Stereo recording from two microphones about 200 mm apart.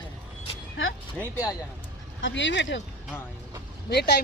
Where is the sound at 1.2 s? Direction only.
15° left (ahead or behind).